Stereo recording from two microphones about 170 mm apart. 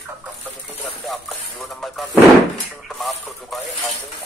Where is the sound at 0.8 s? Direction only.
Centre (ahead or behind).